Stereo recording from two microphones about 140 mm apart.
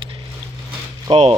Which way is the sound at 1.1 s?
45° right (ahead or behind).